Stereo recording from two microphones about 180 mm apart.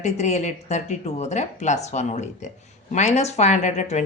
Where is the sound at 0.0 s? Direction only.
40° left (ahead or behind).